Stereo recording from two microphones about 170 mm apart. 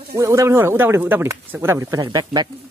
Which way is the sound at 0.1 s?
15° right (ahead or behind).